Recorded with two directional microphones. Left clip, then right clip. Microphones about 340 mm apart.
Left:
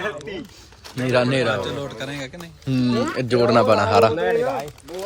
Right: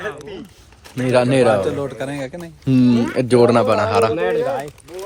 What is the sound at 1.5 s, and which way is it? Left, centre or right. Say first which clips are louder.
Speech: right 7 dB; centre.